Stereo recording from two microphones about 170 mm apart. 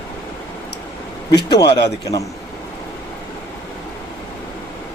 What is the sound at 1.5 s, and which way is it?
Speech, 25° left (ahead or behind).